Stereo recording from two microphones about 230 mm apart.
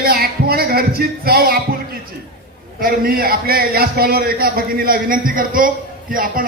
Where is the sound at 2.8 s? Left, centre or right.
Right.